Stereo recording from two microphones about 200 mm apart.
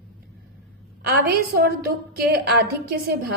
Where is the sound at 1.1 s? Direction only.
50° right (ahead or behind).